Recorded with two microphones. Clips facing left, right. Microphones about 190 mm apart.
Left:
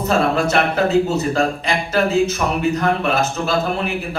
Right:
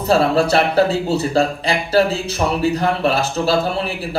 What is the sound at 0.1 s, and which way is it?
A man's voice, 35° right (ahead or behind).